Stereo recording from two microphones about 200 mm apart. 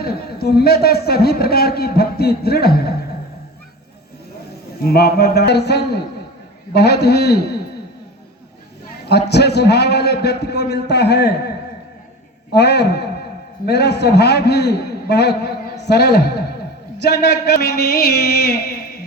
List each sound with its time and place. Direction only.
0.0 s a man's voice: 50° left (ahead or behind)
4.8 s a man's voice: 50° left (ahead or behind)
9.3 s a man's voice: 55° left (ahead or behind)